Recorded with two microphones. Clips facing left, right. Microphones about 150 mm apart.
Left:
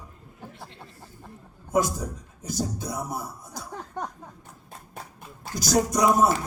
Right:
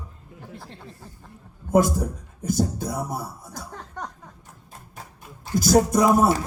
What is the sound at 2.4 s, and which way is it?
Speech, 50° right (ahead or behind).